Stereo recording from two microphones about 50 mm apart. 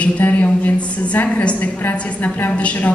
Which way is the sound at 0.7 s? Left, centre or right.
Left.